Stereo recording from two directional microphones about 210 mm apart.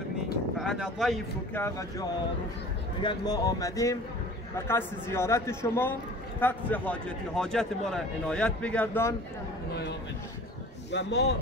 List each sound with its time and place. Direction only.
0.6 s speech: centre (ahead or behind)
1.5 s a man's voice: 10° left (ahead or behind)
10.9 s a man's voice: 55° left (ahead or behind)